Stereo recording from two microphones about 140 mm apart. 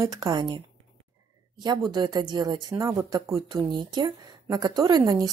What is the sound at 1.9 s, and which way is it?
Speech, 30° right (ahead or behind).